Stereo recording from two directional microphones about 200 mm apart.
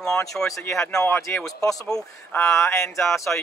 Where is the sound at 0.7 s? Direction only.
5° left (ahead or behind).